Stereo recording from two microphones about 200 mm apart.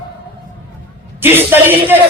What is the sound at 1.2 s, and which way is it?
Speech, 10° right (ahead or behind).